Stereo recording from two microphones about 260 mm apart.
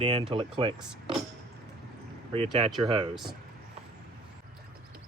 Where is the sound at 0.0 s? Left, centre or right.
Right.